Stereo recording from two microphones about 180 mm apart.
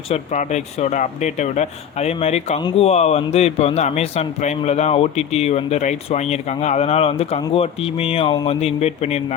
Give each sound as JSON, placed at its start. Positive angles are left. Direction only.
{"t": 0.1, "sound": "speech", "side_deg": 40}